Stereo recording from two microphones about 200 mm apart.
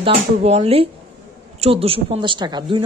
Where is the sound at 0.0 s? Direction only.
30° right (ahead or behind).